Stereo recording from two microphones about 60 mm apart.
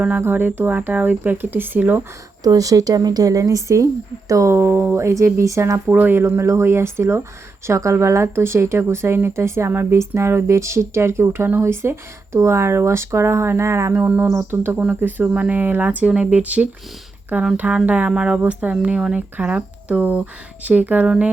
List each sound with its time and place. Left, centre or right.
0.2 s speech: right
2.4 s speech: right
5.1 s speech: right
5.9 s speech: right
6.1 s speech: right
11.3 s speech: right
11.6 s speech: right
14.8 s speech: right